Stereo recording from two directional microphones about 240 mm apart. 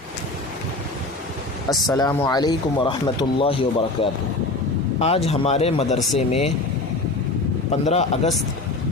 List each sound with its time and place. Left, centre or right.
1.9 s speech: centre
7.7 s speech: left